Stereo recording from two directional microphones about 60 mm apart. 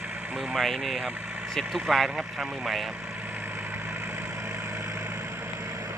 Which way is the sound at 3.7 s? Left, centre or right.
Right.